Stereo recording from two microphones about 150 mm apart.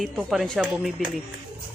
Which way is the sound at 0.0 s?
Centre (ahead or behind).